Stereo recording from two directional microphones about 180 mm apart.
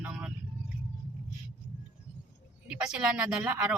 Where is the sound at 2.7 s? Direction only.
5° right (ahead or behind).